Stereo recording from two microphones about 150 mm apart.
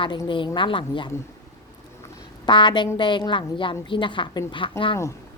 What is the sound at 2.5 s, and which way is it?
A woman's voice, 30° left (ahead or behind).